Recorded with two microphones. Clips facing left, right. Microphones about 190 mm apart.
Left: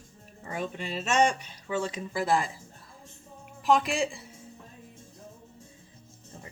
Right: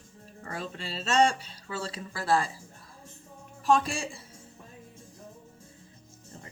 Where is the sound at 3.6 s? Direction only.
15° left (ahead or behind).